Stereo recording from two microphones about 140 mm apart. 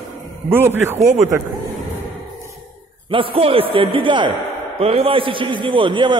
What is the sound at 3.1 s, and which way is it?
A man's voice, 40° right (ahead or behind).